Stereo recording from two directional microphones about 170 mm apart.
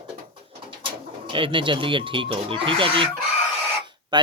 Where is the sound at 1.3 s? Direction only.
30° right (ahead or behind).